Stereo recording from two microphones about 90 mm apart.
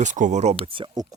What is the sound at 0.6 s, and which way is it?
Speech, 70° right (ahead or behind).